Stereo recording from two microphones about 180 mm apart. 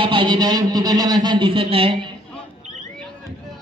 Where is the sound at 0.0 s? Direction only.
25° right (ahead or behind).